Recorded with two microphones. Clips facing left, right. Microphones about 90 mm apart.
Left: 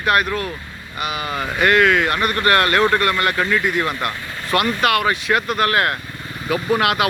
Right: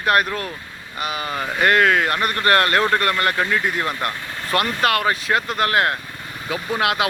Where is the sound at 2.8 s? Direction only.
30° left (ahead or behind).